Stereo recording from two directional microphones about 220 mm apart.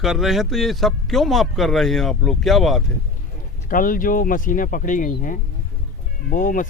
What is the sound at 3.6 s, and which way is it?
Speech, 40° left (ahead or behind).